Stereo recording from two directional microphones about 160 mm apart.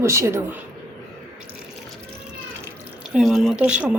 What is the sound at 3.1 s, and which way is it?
Speech, centre (ahead or behind).